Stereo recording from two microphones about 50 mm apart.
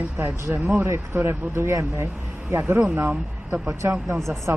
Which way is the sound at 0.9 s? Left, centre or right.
Right.